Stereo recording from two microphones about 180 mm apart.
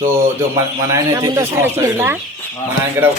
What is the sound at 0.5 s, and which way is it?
Speech, 20° right (ahead or behind).